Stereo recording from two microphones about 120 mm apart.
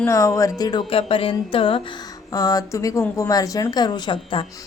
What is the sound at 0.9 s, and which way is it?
Speech, 50° left (ahead or behind).